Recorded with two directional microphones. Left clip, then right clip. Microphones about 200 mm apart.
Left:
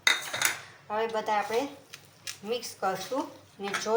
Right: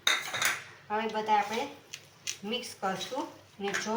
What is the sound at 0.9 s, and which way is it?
Speech, 50° left (ahead or behind).